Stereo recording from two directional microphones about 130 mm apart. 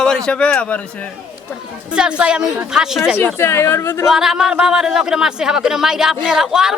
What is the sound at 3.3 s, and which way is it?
Speech, 20° left (ahead or behind).